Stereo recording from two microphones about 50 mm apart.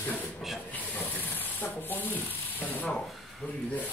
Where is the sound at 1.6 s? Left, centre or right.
Left.